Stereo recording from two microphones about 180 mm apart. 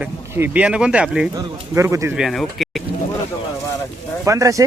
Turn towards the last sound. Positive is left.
turn(degrees=-15)  # may be behind; listen again after turning